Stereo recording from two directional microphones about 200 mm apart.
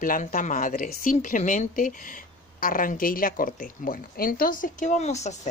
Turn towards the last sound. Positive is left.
turn(degrees=35)  # may be behind; listen again after turning